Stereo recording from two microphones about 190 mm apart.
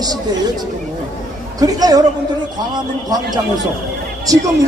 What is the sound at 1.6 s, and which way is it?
Speech, 20° right (ahead or behind).